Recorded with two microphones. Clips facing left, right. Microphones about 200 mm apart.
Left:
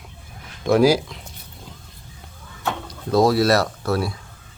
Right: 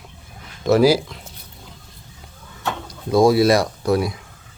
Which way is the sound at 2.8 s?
10° right (ahead or behind).